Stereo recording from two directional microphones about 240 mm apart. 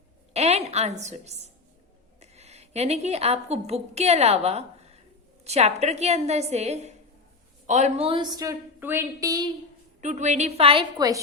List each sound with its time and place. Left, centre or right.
0.3 s a woman's voice: right
10.0 s a woman's voice: right